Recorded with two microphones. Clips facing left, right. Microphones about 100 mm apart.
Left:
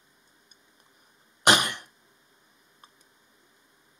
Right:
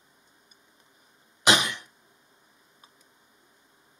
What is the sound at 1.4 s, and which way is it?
Cough, 55° left (ahead or behind).